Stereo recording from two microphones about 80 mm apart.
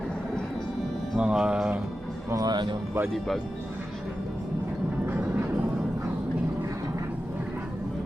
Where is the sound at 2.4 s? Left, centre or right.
Right.